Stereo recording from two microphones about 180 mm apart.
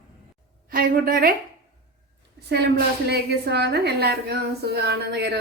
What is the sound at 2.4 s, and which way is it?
A woman's voice, 65° right (ahead or behind).